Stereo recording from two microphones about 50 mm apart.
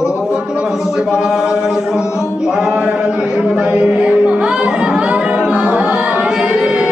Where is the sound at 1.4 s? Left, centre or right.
Centre.